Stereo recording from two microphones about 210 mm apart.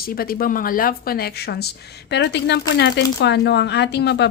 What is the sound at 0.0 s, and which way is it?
Speech, 45° left (ahead or behind).